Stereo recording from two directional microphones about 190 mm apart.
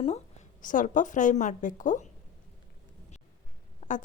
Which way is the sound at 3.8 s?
40° left (ahead or behind).